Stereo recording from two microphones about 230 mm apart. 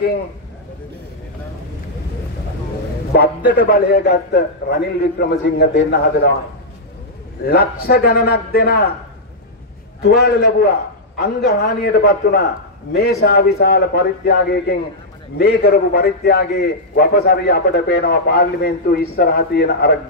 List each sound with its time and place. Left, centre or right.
3.1 s a man's voice: left
7.4 s a man's voice: left
10.0 s a man's voice: left